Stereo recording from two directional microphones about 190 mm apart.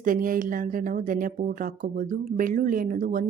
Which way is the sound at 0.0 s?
45° right (ahead or behind).